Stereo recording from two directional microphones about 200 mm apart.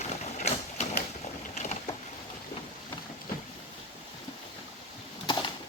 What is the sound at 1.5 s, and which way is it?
Boat, 35° left (ahead or behind).